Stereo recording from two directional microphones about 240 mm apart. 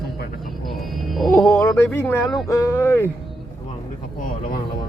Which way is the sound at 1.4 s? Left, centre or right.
Centre.